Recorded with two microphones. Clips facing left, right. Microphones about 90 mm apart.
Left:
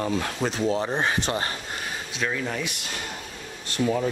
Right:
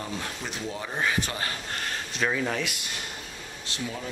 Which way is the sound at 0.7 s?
30° left (ahead or behind).